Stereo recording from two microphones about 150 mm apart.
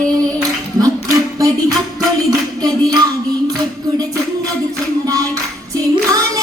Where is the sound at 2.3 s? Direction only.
25° right (ahead or behind).